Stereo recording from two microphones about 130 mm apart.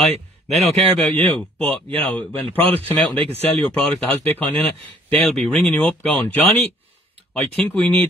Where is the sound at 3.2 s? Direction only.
50° right (ahead or behind).